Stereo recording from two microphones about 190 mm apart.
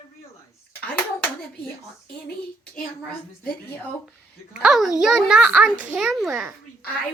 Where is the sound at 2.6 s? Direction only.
5° left (ahead or behind).